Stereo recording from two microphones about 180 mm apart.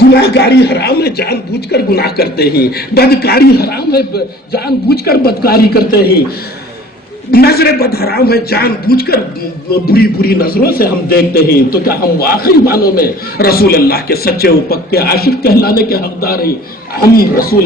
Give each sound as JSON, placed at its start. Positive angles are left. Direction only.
{"t": 0.1, "sound": "a man's voice", "side_deg": 65}
{"t": 7.3, "sound": "a man's voice", "side_deg": 60}